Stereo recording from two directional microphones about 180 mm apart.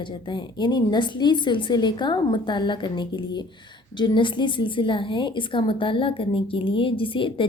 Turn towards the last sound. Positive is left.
turn(degrees=30)  # may be behind; listen again after turning